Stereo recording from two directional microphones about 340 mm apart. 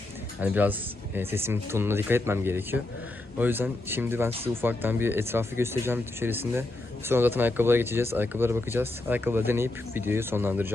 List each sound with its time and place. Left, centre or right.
0.4 s speech: centre
4.3 s speech: centre
4.6 s speech: centre